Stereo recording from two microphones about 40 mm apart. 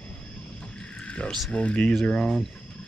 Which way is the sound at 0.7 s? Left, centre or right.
Left.